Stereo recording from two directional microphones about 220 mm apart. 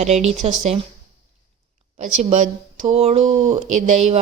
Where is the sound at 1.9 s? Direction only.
35° right (ahead or behind).